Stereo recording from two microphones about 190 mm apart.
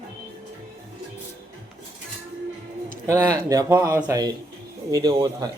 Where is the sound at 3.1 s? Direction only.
15° right (ahead or behind).